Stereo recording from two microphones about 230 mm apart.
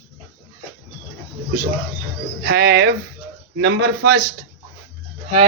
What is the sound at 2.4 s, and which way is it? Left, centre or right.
A man's voice, right.